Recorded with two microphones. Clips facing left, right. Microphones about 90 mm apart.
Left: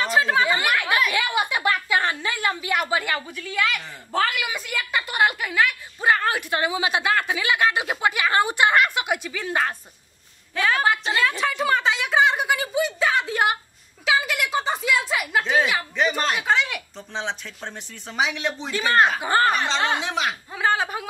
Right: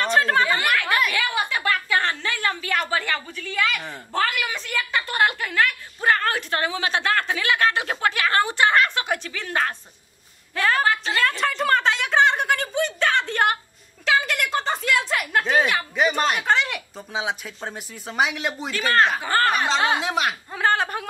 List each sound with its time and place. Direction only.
0.0 s a sound: 5° left (ahead or behind)
1.1 s a woman's voice: 15° left (ahead or behind)
10.5 s a woman's voice: centre (ahead or behind)
18.7 s a woman's voice: 20° left (ahead or behind)
19.5 s speech: 5° right (ahead or behind)